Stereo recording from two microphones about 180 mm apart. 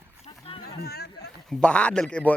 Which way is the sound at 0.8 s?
60° left (ahead or behind).